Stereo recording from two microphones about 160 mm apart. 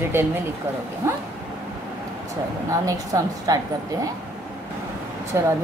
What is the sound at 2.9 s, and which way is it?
Speech, 20° right (ahead or behind).